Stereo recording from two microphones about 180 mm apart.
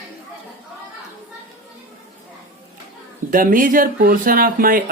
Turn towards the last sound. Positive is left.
turn(degrees=-50)  # may be behind; listen again after turning